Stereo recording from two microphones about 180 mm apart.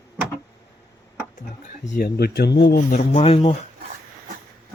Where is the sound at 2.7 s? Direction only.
45° left (ahead or behind).